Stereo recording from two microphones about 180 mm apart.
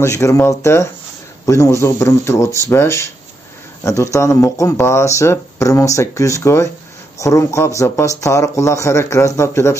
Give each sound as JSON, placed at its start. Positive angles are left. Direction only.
{"t": 0.0, "sound": "speech", "side_deg": 15}